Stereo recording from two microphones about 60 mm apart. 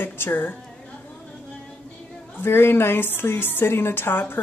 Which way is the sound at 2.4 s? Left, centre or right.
Left.